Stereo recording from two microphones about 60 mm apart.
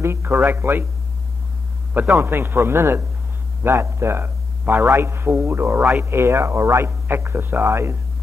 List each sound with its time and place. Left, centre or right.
0.0 s speech: right
2.0 s speech: right